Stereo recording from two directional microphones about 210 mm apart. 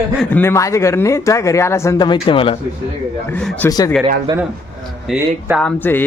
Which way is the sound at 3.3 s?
5° left (ahead or behind).